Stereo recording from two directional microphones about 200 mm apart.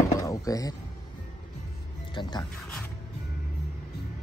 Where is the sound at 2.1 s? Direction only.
20° left (ahead or behind).